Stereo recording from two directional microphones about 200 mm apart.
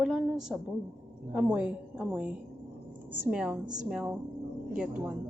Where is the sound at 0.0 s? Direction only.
5° right (ahead or behind).